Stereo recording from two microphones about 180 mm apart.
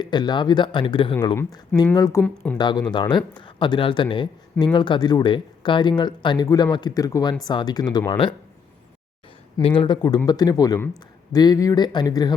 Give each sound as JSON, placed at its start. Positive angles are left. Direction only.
{"t": 0.0, "sound": "a man's voice", "side_deg": 25}
{"t": 9.6, "sound": "a man's voice", "side_deg": 30}